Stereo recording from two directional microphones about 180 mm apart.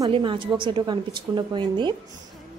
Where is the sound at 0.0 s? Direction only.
25° right (ahead or behind).